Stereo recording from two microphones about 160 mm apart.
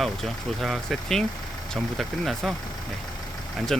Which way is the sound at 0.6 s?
Centre (ahead or behind).